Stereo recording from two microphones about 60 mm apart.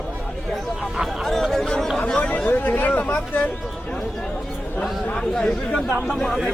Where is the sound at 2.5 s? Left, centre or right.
Left.